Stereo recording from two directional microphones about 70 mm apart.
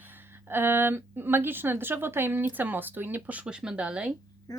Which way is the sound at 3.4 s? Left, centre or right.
Centre.